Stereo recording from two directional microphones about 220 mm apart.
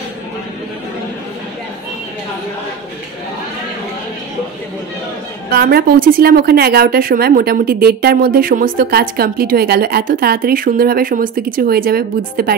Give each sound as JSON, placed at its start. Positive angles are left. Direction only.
{"t": 5.5, "sound": "a woman's voice", "side_deg": -45}